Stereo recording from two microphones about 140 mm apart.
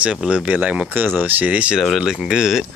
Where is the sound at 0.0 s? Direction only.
5° right (ahead or behind).